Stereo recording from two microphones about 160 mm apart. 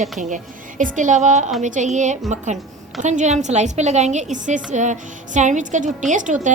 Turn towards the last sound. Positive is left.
turn(degrees=-50)  # may be behind; listen again after turning